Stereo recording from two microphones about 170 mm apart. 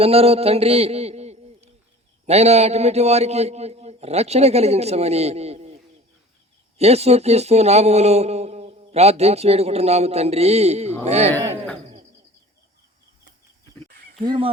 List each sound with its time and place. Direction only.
0.0 s a man's voice: 35° right (ahead or behind)
14.2 s speech: 30° right (ahead or behind)